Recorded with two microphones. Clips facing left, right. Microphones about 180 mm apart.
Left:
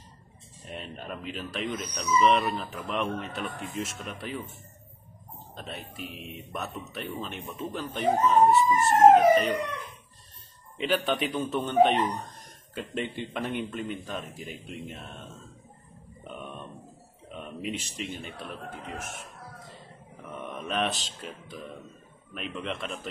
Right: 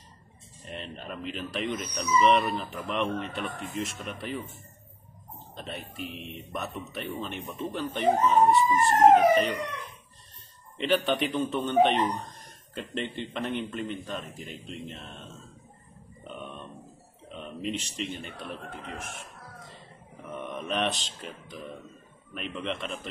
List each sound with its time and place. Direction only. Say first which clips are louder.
0.7 s speech: even; 5° left (ahead or behind)
5.6 s speech: right 2 dB; centre (ahead or behind)
10.8 s a man's voice: right 1 dB; centre (ahead or behind)
17.4 s speech: right 1 dB; 5° left (ahead or behind)
20.5 s speech: even; centre (ahead or behind)